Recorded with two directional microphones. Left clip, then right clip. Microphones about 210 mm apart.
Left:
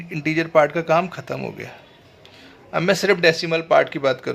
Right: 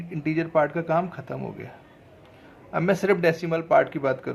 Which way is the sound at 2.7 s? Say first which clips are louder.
Left 4 dB; 20° left (ahead or behind).